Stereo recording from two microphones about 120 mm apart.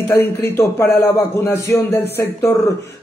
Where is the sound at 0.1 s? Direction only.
20° left (ahead or behind).